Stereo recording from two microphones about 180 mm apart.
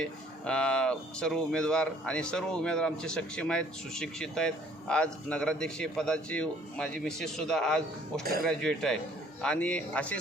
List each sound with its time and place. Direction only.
0.0 s speech: 5° left (ahead or behind)
8.2 s speech: 55° right (ahead or behind)
8.4 s speech: 5° left (ahead or behind)